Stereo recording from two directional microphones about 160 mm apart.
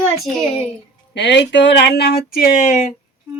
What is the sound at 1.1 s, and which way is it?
Speech, 90° left.